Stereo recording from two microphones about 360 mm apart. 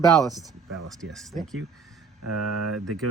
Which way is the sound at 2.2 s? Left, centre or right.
Right.